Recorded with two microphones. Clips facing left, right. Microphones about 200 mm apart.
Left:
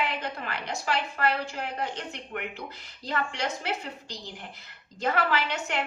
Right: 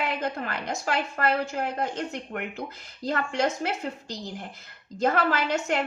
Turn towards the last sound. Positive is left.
turn(degrees=-45)  # may be behind; listen again after turning